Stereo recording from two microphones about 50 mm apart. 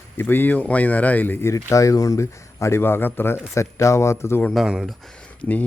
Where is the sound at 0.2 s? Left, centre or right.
Left.